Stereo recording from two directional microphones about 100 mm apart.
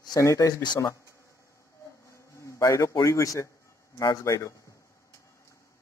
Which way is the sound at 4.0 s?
35° left (ahead or behind).